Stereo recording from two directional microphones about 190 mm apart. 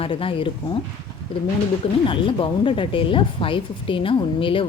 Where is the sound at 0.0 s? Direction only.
30° left (ahead or behind).